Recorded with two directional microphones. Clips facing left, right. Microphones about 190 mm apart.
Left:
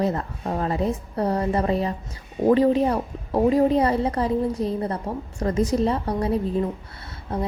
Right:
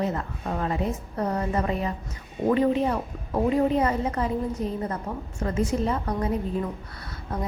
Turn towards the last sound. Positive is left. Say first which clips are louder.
# left 4 dB
turn(degrees=30)  # may be behind; listen again after turning